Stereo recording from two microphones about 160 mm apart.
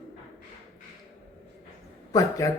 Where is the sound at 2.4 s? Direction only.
20° left (ahead or behind).